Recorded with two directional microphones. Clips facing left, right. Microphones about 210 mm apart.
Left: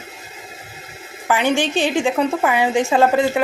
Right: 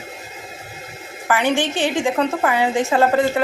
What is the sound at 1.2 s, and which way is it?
A woman's voice, 15° left (ahead or behind).